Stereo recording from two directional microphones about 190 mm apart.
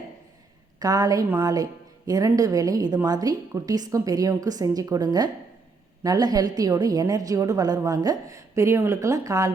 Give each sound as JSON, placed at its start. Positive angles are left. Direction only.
{"t": 0.8, "sound": "a woman's voice", "side_deg": -20}